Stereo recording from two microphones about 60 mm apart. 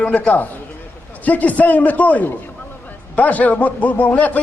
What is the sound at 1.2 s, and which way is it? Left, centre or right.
A man's voice, left.